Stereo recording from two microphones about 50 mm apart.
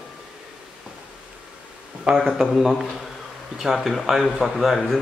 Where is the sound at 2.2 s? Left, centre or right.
Centre.